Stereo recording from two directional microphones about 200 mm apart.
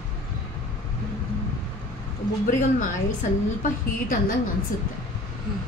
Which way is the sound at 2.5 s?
40° left (ahead or behind).